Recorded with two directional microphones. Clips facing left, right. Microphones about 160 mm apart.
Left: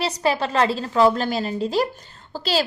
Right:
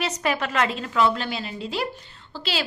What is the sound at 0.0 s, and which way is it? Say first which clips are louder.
A woman's voice: left 3 dB; 30° left (ahead or behind).